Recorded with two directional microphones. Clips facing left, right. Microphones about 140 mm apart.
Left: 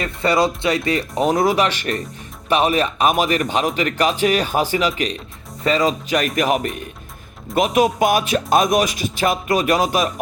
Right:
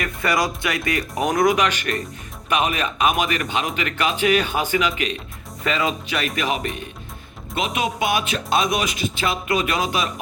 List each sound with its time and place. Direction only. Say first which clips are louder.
0.0 s speech: left 4 dB; 30° left (ahead or behind)